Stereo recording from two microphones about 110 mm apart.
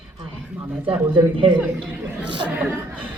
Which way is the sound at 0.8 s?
50° right (ahead or behind).